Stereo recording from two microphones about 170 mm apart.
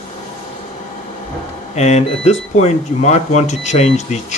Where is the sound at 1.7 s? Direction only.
40° left (ahead or behind).